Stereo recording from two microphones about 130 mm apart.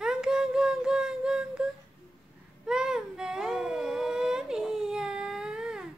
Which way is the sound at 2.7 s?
5° right (ahead or behind).